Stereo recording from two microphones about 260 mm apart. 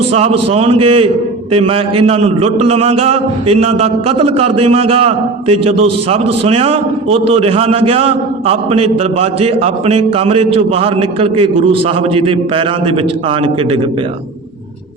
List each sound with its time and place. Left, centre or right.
0.1 s a man's voice: right